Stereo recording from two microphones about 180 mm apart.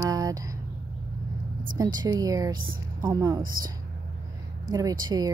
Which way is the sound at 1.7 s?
20° right (ahead or behind).